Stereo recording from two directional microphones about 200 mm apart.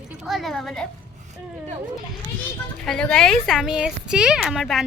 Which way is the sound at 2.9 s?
5° left (ahead or behind).